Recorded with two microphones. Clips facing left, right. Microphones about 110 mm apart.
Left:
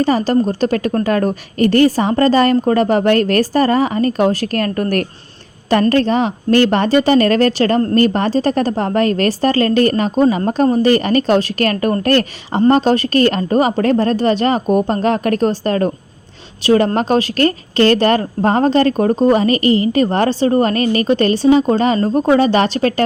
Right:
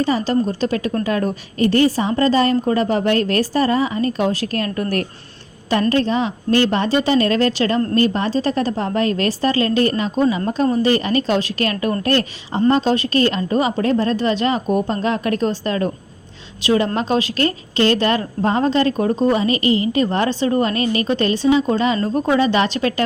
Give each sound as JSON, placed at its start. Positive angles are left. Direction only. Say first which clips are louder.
{"t": 0.0, "sound": "a woman's voice", "louder": "left 4 dB", "side_deg": 50}